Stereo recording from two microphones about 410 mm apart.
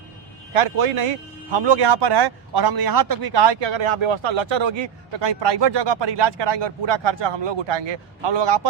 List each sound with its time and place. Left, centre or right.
1.5 s a man's voice: right